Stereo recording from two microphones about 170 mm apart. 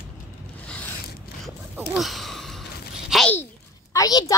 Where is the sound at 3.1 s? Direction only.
10° left (ahead or behind).